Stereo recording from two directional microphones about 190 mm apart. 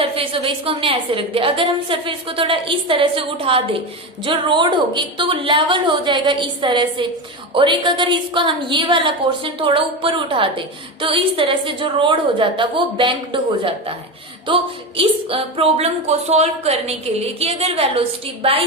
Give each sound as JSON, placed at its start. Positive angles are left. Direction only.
{"t": 0.0, "sound": "a woman's voice", "side_deg": -30}
{"t": 14.4, "sound": "a woman's voice", "side_deg": -30}